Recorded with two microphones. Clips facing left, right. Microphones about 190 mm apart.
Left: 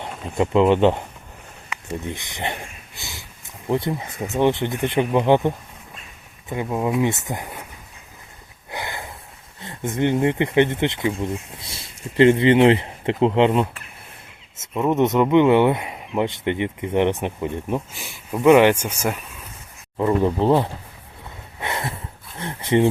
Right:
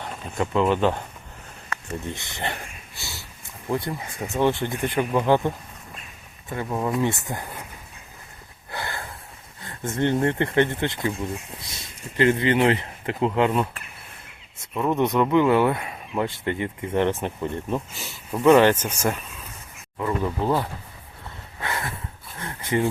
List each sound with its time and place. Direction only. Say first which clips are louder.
0.0 s speech: left 5 dB; 25° left (ahead or behind)
3.7 s speech: left 4 dB; 25° left (ahead or behind)
8.7 s a sound: left 1 dB; 15° left (ahead or behind)
9.6 s speech: left 2 dB; 20° left (ahead or behind)
20.0 s speech: left 6 dB; 30° left (ahead or behind)
21.6 s a sound: left 2 dB; 20° left (ahead or behind)
22.4 s speech: left 6 dB; 25° left (ahead or behind)